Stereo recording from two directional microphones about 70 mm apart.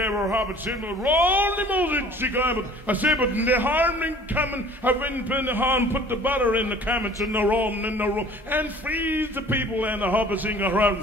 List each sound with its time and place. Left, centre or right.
1.0 s a man's voice: right